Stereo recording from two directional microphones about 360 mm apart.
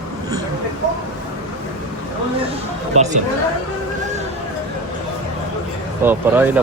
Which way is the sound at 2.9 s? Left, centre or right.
Centre.